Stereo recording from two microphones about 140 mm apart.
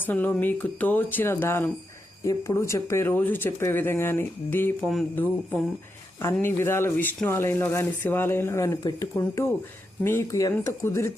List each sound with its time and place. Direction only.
0.0 s speech: 15° left (ahead or behind)
6.2 s speech: 20° left (ahead or behind)